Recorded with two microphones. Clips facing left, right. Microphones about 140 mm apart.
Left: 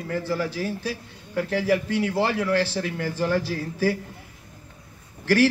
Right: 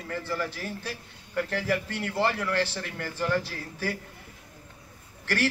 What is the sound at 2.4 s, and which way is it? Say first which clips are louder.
Speech: left 6 dB; 35° left (ahead or behind).